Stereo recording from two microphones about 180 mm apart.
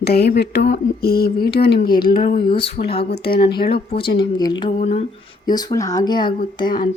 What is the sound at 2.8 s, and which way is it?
Speech, 60° left (ahead or behind).